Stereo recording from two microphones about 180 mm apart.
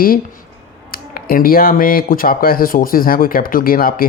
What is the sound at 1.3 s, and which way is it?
Speech, 55° left (ahead or behind).